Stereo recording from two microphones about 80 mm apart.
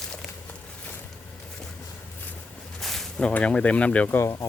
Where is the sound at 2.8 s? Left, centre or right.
Centre.